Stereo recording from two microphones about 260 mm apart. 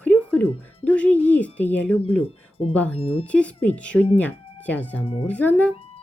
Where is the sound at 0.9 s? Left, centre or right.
Centre.